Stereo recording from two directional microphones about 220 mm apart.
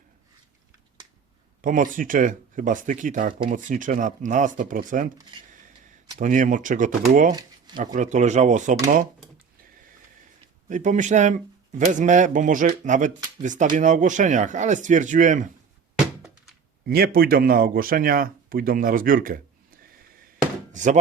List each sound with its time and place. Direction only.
1.6 s speech: 35° right (ahead or behind)
6.1 s speech: 35° right (ahead or behind)
10.7 s speech: 35° right (ahead or behind)
16.8 s speech: 45° right (ahead or behind)